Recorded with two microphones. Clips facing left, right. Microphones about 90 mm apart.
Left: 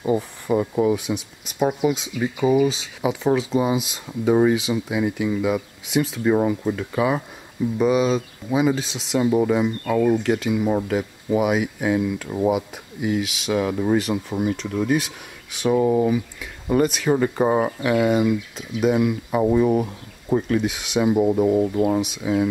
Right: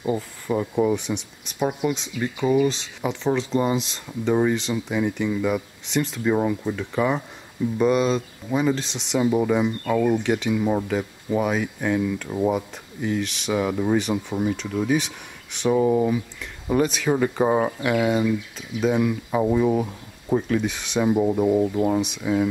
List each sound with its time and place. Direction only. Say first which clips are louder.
0.0 s speech: left 4 dB; 10° left (ahead or behind)